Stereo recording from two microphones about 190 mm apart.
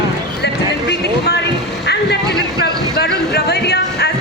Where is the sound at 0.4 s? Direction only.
60° left (ahead or behind).